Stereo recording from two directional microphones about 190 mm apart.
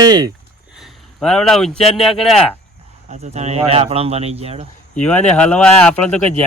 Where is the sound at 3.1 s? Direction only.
35° right (ahead or behind).